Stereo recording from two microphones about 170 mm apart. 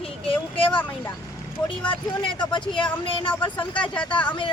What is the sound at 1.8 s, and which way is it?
Speech, 30° left (ahead or behind).